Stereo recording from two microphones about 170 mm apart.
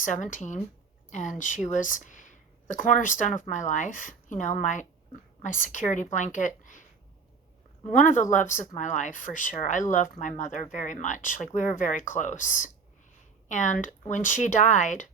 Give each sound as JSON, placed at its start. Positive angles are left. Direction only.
{"t": 0.0, "sound": "a woman's voice", "side_deg": 45}
{"t": 7.9, "sound": "speech", "side_deg": 45}